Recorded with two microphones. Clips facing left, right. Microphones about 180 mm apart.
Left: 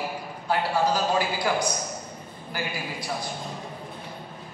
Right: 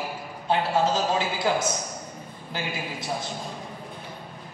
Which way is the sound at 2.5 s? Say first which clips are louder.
Even; 25° right (ahead or behind).